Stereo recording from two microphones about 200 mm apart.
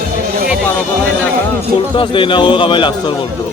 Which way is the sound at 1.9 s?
25° left (ahead or behind).